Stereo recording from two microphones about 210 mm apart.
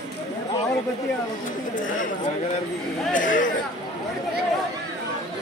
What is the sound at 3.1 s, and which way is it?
Speech, 40° left (ahead or behind).